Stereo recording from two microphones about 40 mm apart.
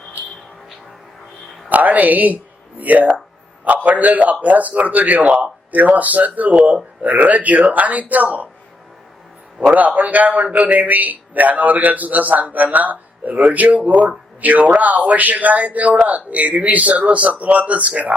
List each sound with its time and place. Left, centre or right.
1.7 s a man's voice: right
9.6 s a man's voice: right